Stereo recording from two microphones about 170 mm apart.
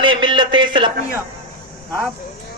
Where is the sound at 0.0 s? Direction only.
30° right (ahead or behind).